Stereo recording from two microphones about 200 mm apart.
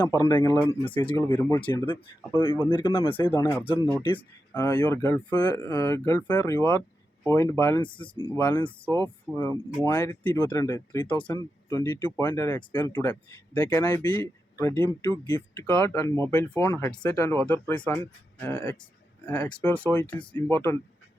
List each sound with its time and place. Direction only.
0.0 s speech: 20° left (ahead or behind)
1.4 s speech: 15° left (ahead or behind)
3.8 s speech: 10° left (ahead or behind)
4.0 s speech: 25° left (ahead or behind)
7.8 s speech: 25° left (ahead or behind)
8.3 s speech: 10° left (ahead or behind)